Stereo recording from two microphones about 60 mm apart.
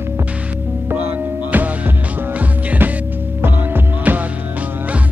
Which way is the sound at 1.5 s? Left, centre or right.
Right.